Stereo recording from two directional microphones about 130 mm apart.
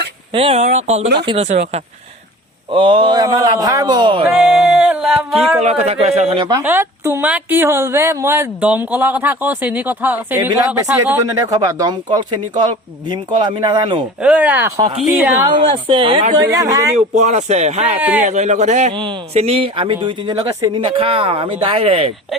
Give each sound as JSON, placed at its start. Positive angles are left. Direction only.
{"t": 0.3, "sound": "speech", "side_deg": -45}
{"t": 0.6, "sound": "speech", "side_deg": -60}
{"t": 2.7, "sound": "speech", "side_deg": -40}
{"t": 4.3, "sound": "a sound", "side_deg": -10}
{"t": 5.6, "sound": "speech", "side_deg": -55}
{"t": 6.6, "sound": "speech", "side_deg": -15}
{"t": 14.2, "sound": "speech", "side_deg": -10}
{"t": 15.5, "sound": "speech", "side_deg": -40}
{"t": 16.3, "sound": "speech", "side_deg": -30}
{"t": 17.2, "sound": "speech", "side_deg": -65}